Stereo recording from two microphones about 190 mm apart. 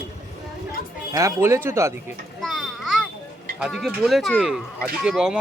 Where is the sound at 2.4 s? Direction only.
Centre (ahead or behind).